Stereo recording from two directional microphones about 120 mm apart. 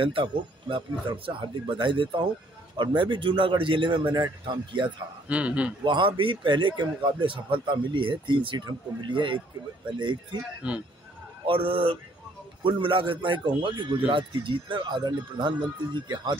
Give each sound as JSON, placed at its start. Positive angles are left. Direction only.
{"t": 0.0, "sound": "speech", "side_deg": -45}
{"t": 5.3, "sound": "a man's voice", "side_deg": -10}
{"t": 5.9, "sound": "speech", "side_deg": -45}
{"t": 10.6, "sound": "a man's voice", "side_deg": -10}
{"t": 11.4, "sound": "speech", "side_deg": -45}